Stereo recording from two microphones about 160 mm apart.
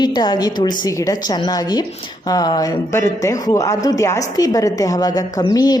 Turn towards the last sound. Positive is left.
turn(degrees=25)  # may be behind; listen again after turning